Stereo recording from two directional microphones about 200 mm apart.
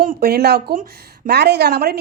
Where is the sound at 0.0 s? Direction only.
45° right (ahead or behind).